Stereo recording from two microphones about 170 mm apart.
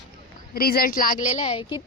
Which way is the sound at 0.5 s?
60° left (ahead or behind).